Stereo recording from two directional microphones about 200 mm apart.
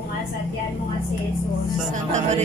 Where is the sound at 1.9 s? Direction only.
35° right (ahead or behind).